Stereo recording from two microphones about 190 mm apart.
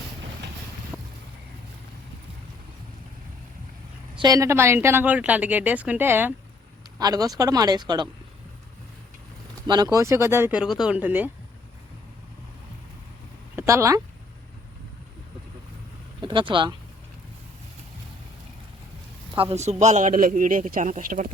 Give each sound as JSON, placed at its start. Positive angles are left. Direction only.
{"t": 0.9, "sound": "vehicle", "side_deg": 0}
{"t": 4.2, "sound": "speech", "side_deg": -20}
{"t": 9.6, "sound": "speech", "side_deg": -20}
{"t": 13.6, "sound": "speech", "side_deg": -15}
{"t": 16.2, "sound": "speech", "side_deg": -25}
{"t": 19.4, "sound": "a man's voice", "side_deg": -35}